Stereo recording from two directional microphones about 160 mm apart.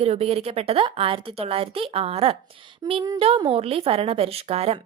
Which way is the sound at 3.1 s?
35° right (ahead or behind).